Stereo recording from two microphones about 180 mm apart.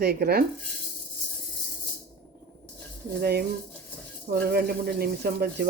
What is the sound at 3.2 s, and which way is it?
Speech, 60° right (ahead or behind).